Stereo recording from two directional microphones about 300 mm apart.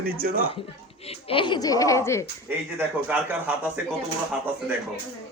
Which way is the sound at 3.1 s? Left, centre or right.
Centre.